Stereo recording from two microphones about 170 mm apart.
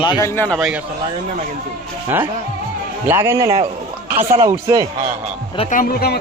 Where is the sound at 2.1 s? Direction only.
15° right (ahead or behind).